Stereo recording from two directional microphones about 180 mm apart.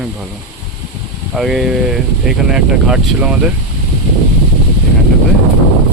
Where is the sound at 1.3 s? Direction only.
Centre (ahead or behind).